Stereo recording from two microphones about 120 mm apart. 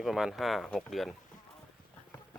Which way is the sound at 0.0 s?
5° right (ahead or behind).